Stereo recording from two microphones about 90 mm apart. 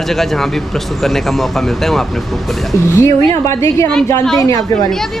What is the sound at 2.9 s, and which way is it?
A woman's voice, 30° left (ahead or behind).